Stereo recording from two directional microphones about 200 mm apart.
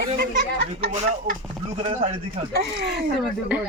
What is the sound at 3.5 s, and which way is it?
Speech, 5° right (ahead or behind).